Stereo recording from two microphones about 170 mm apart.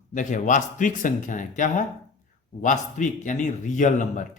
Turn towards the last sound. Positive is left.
turn(degrees=50)  # may be behind; listen again after turning